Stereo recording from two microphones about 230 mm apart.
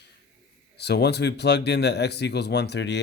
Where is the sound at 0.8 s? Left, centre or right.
Left.